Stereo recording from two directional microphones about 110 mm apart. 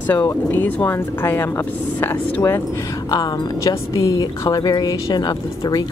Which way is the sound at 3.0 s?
35° left (ahead or behind).